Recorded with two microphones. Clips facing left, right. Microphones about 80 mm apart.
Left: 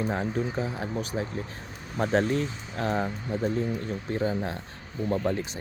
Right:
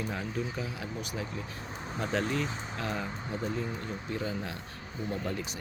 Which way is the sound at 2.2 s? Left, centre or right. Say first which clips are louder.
Left 5 dB; right.